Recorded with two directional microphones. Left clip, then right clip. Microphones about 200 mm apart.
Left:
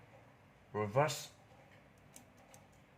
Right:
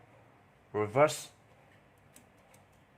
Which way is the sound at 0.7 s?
35° right (ahead or behind).